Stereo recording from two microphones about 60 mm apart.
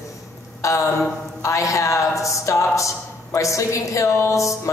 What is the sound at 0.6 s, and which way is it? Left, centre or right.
A woman's voice, left.